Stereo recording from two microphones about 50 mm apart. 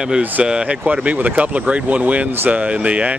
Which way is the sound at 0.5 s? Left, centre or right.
Centre.